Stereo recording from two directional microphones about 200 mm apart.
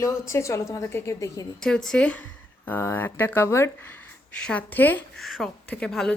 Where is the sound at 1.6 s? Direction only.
5° left (ahead or behind).